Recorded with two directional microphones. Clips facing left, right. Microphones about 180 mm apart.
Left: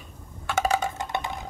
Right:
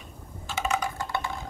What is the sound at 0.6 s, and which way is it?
Wood block, 30° left (ahead or behind).